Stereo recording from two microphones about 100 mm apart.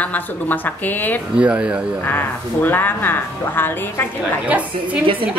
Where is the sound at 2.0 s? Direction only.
20° left (ahead or behind).